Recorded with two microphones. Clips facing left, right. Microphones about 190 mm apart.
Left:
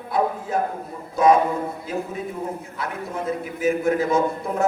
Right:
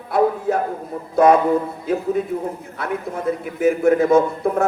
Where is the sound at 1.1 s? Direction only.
60° right (ahead or behind).